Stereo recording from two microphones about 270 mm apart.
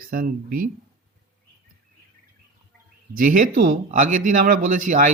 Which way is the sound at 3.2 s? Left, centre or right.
Right.